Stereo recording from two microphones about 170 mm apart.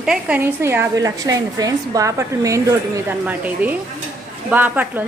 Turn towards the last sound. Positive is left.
turn(degrees=-10)  # may be behind; listen again after turning